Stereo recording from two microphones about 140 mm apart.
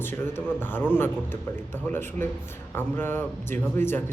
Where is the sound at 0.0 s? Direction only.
15° left (ahead or behind).